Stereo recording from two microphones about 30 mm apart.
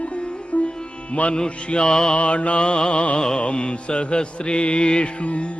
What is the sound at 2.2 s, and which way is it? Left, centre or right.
Mantra, left.